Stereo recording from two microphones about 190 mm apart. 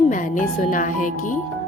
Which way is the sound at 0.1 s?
40° left (ahead or behind).